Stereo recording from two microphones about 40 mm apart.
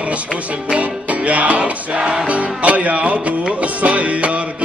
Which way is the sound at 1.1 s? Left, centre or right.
Right.